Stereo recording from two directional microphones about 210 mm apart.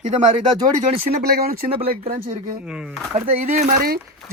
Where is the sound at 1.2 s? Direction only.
50° right (ahead or behind).